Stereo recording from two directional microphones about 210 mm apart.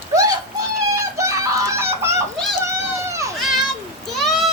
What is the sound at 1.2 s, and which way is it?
Bird, 15° right (ahead or behind).